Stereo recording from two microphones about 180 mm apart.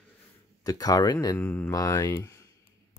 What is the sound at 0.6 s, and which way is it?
Speech, 20° left (ahead or behind).